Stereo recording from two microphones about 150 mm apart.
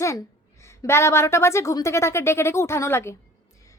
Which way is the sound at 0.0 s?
20° left (ahead or behind).